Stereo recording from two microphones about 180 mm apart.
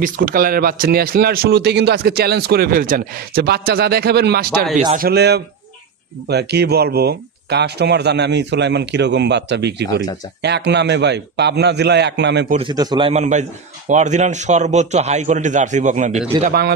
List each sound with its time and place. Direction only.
0.0 s a man's voice: 50° right (ahead or behind); by 12.4 s 70° right (ahead or behind)
12.5 s a man's voice: 25° right (ahead or behind)
13.1 s speech: 40° right (ahead or behind)
16.4 s a man's voice: 60° right (ahead or behind)